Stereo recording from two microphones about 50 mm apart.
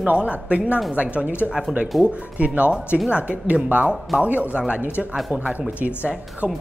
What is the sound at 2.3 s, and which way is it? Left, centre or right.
Speech, right.